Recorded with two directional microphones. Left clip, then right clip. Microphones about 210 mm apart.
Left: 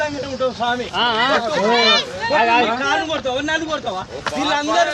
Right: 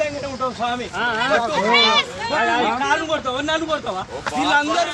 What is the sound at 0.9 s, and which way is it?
Speech, 35° left (ahead or behind).